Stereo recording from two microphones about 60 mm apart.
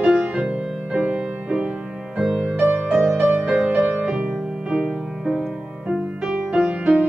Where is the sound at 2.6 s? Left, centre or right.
Right.